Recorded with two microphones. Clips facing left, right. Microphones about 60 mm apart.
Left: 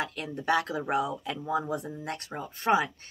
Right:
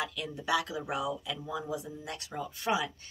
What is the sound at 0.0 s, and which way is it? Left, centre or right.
A woman's voice, left.